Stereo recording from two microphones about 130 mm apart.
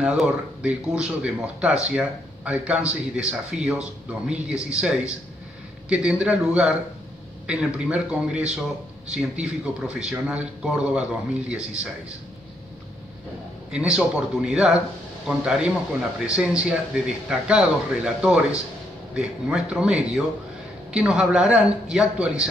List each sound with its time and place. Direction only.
0.0 s speech: 5° right (ahead or behind)
13.7 s a man's voice: 5° right (ahead or behind)